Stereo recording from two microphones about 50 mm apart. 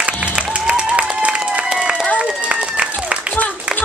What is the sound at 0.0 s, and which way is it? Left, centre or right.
Applause, right.